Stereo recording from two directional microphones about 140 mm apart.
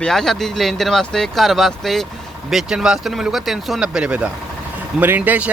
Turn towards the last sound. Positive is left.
turn(degrees=-10)  # may be behind; listen again after turning